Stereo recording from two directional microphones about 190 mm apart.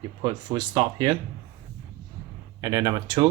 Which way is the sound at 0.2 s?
25° right (ahead or behind).